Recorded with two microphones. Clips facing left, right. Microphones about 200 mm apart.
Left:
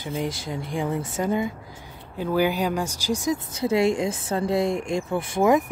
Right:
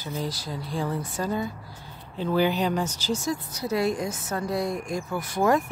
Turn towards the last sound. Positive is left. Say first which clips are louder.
# left 3 dB
turn(degrees=20)  # may be behind; listen again after turning